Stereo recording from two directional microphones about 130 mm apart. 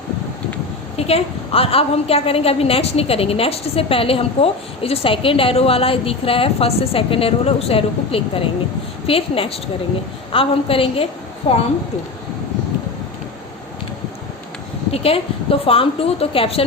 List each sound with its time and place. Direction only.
0.9 s a woman's voice: 50° left (ahead or behind)
14.9 s a woman's voice: 50° left (ahead or behind)